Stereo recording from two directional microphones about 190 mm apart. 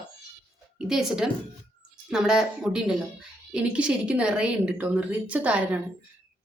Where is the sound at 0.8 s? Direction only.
5° right (ahead or behind).